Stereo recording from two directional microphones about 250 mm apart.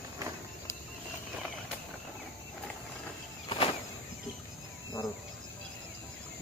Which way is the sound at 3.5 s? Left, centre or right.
Left.